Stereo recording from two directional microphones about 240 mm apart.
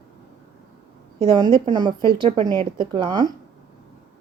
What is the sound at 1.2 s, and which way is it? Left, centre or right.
Speech, centre.